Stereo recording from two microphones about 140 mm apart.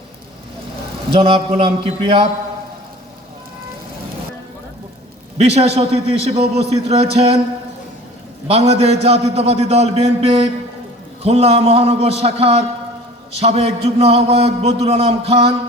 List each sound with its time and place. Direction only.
1.1 s a man's voice: 40° right (ahead or behind)
5.5 s a man's voice: 50° right (ahead or behind)
8.4 s a man's voice: 45° right (ahead or behind)